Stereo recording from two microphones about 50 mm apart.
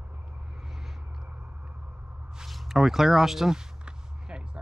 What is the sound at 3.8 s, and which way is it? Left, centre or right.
Basketball bounce, right.